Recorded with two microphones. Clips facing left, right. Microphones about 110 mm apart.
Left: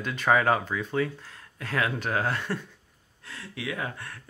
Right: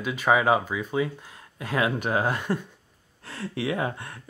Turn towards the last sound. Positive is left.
turn(degrees=-20)  # may be behind; listen again after turning